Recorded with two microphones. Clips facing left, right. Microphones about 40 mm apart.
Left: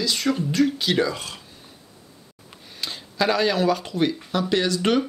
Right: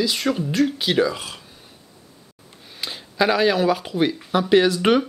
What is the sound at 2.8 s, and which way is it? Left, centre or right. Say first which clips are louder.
Speech: right 3 dB; centre.